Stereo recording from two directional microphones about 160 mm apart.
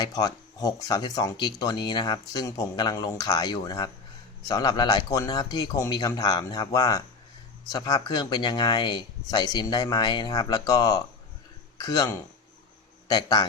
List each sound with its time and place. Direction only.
0.0 s speech: 25° left (ahead or behind)